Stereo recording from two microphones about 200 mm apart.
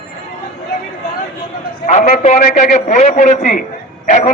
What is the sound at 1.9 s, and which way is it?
A man's voice, 35° left (ahead or behind).